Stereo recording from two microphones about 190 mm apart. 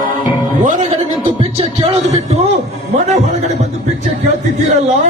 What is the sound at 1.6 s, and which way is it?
Speech, 35° right (ahead or behind).